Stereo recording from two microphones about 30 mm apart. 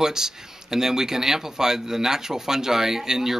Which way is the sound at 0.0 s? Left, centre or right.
Centre.